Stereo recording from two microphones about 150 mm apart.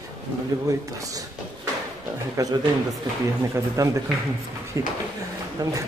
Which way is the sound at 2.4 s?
20° right (ahead or behind).